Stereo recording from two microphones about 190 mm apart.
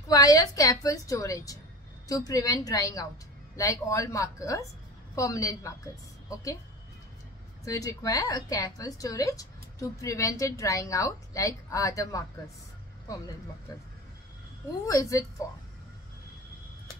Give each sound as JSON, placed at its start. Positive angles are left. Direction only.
{"t": 0.1, "sound": "a woman's voice", "side_deg": 20}
{"t": 7.6, "sound": "a woman's voice", "side_deg": 15}
{"t": 14.9, "sound": "a woman's voice", "side_deg": 15}